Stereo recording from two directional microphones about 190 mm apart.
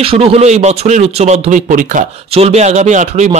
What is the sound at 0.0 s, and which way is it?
A man's voice, 30° right (ahead or behind).